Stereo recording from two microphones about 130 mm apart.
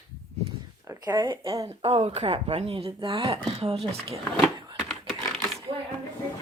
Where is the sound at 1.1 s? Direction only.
35° right (ahead or behind).